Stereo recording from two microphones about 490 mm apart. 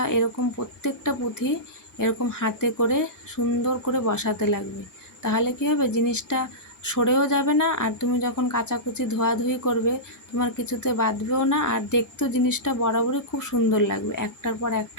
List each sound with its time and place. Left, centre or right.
0.0 s a woman's voice: left